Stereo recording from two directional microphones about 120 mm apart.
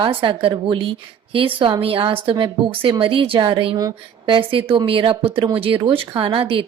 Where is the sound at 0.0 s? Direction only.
45° right (ahead or behind).